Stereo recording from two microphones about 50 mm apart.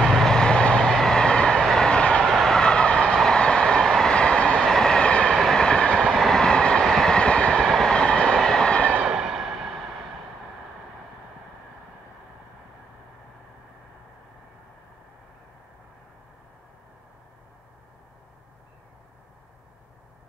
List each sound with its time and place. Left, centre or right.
0.0 s vehicle: centre
2.2 s vehicle: centre
4.1 s train: centre
5.3 s train: centre
5.6 s train: centre
7.6 s train: centre
9.0 s a sound: centre